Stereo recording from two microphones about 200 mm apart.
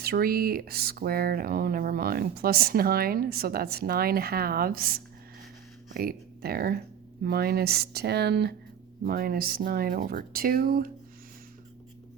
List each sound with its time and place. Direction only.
0.0 s speech: 50° right (ahead or behind)